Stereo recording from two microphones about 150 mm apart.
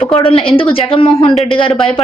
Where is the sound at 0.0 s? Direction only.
40° left (ahead or behind).